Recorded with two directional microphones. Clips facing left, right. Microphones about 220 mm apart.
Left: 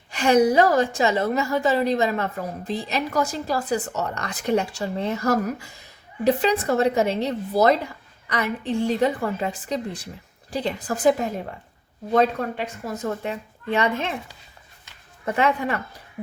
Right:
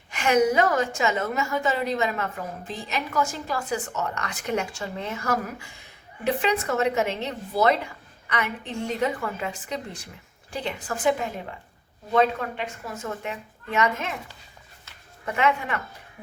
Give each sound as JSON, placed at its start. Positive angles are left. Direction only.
{"t": 0.1, "sound": "a woman's voice", "side_deg": 35}
{"t": 12.1, "sound": "a woman's voice", "side_deg": 40}
{"t": 15.3, "sound": "a woman's voice", "side_deg": 35}